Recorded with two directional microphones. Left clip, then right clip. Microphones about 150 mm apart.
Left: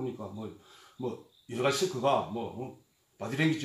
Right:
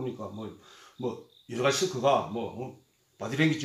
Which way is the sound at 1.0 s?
20° left (ahead or behind).